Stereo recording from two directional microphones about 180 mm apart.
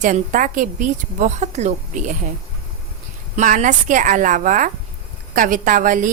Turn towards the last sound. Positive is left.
turn(degrees=-45)  # may be behind; listen again after turning